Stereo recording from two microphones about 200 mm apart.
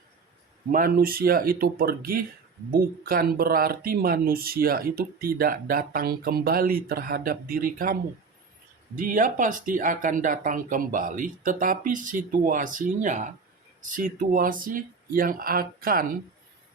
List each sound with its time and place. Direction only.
0.7 s speech: 45° right (ahead or behind)
9.0 s speech: 40° right (ahead or behind)